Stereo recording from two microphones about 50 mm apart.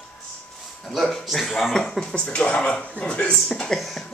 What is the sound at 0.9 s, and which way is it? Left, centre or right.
Speech, centre.